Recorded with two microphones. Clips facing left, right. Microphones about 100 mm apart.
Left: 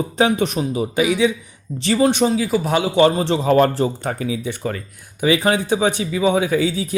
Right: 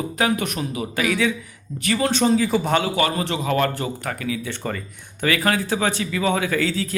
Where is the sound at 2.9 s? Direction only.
25° left (ahead or behind).